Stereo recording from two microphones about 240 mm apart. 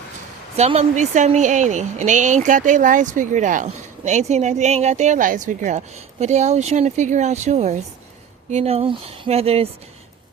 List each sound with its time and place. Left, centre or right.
0.5 s a woman's voice: right